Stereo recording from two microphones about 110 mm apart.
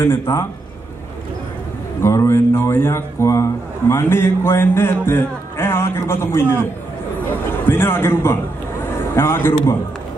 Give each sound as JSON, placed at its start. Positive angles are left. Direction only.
{"t": 0.0, "sound": "speech", "side_deg": 25}
{"t": 2.0, "sound": "speech", "side_deg": 25}
{"t": 7.6, "sound": "speech", "side_deg": 20}